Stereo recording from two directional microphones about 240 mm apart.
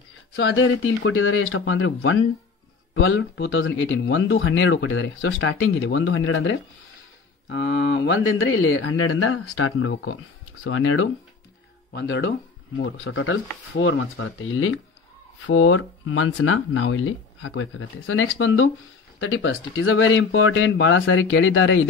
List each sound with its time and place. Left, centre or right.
0.4 s speech: left
11.9 s speech: left